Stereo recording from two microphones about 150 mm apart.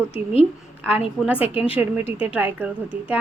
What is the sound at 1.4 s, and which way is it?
Speech, 40° left (ahead or behind).